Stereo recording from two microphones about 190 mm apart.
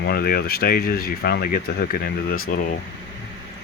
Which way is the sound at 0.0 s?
55° left (ahead or behind).